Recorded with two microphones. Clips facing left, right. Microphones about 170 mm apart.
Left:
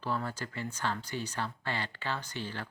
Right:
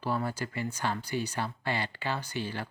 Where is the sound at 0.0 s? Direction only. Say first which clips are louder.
Right 3 dB; 10° right (ahead or behind).